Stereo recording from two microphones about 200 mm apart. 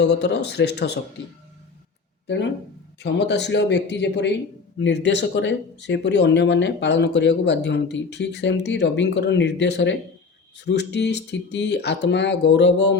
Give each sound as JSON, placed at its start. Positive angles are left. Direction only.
{"t": 0.0, "sound": "speech", "side_deg": 60}
{"t": 2.2, "sound": "speech", "side_deg": 60}